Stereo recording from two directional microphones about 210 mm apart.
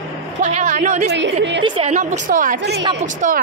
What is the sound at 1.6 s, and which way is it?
A woman's voice, 30° right (ahead or behind).